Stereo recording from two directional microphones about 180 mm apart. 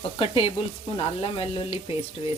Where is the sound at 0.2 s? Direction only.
30° left (ahead or behind).